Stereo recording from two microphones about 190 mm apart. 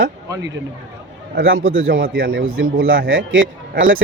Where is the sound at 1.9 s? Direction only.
50° right (ahead or behind).